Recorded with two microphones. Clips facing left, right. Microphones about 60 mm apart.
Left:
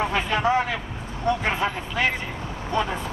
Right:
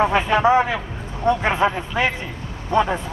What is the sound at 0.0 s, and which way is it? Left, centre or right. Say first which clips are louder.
A man's voice: right 6 dB; centre.